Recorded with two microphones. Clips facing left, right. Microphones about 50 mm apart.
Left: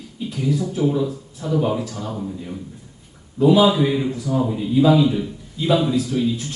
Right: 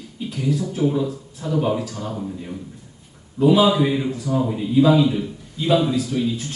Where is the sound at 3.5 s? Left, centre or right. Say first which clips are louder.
Left 1 dB; centre.